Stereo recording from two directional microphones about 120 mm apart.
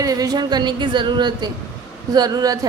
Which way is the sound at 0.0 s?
30° right (ahead or behind).